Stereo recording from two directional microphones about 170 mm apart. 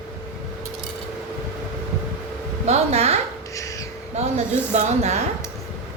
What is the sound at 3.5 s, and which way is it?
Crow, 20° left (ahead or behind).